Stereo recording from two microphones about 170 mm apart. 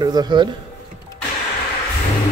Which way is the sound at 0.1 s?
25° right (ahead or behind).